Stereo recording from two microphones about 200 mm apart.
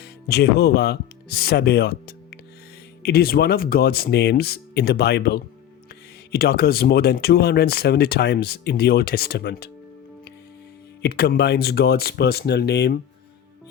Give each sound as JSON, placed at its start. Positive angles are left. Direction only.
{"t": 0.0, "sound": "speech", "side_deg": 55}
{"t": 11.0, "sound": "speech", "side_deg": 55}